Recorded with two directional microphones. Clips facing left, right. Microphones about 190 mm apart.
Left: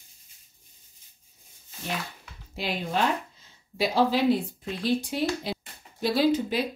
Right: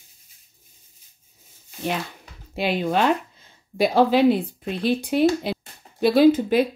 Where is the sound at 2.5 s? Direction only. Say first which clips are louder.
Right 7 dB; 65° right (ahead or behind).